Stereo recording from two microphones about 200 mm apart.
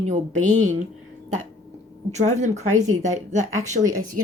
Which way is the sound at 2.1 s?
35° right (ahead or behind).